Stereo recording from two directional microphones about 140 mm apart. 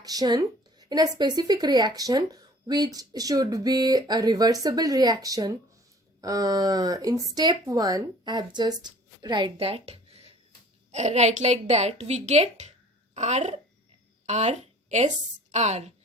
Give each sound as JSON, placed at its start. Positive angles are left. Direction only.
{"t": 0.0, "sound": "a woman's voice", "side_deg": -25}